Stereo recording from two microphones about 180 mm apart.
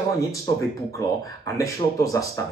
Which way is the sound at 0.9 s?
15° left (ahead or behind).